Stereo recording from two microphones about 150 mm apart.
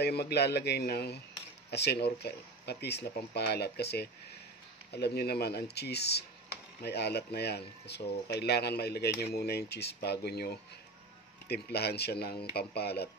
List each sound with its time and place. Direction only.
0.0 s speech: 90° left